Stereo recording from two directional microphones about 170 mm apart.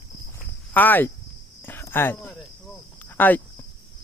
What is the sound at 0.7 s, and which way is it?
Speech, 10° left (ahead or behind).